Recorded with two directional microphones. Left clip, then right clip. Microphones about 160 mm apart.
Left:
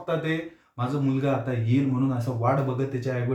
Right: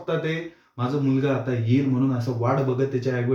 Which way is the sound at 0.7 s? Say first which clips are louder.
Right 3 dB; 10° left (ahead or behind).